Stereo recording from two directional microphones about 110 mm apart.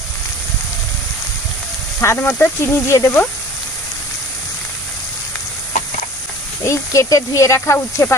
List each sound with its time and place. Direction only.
2.0 s speech: 20° left (ahead or behind)
6.6 s speech: 25° left (ahead or behind)